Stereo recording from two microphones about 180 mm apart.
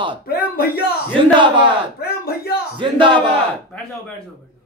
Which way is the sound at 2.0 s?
60° left (ahead or behind).